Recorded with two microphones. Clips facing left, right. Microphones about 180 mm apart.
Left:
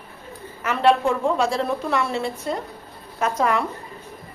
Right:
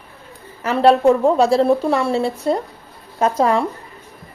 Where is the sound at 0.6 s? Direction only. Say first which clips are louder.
Right 5 dB; 35° right (ahead or behind).